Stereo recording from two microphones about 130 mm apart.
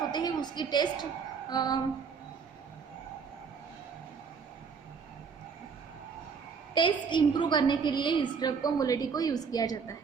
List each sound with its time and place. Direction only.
0.1 s a woman's voice: 35° left (ahead or behind)
6.7 s a woman's voice: 40° left (ahead or behind)